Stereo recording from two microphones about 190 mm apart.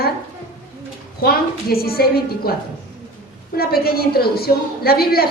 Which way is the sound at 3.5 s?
55° left (ahead or behind).